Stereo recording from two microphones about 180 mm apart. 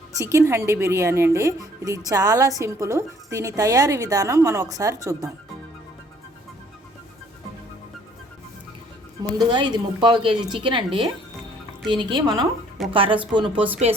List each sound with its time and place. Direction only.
0.2 s a woman's voice: 15° right (ahead or behind)
9.4 s a woman's voice: 25° right (ahead or behind)
11.9 s a woman's voice: 25° right (ahead or behind)